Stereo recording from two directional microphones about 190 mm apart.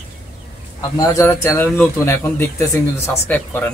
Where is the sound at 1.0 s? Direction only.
15° left (ahead or behind).